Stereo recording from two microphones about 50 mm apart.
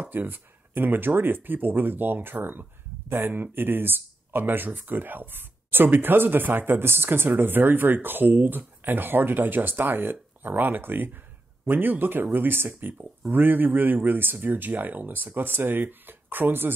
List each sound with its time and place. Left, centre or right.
0.0 s speech: right